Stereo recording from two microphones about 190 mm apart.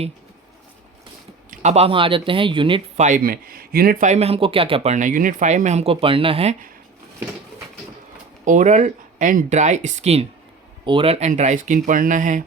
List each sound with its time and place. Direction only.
1.5 s speech: 35° right (ahead or behind)
3.1 s speech: 50° right (ahead or behind); by 6.7 s 35° right (ahead or behind)
8.4 s speech: 40° right (ahead or behind)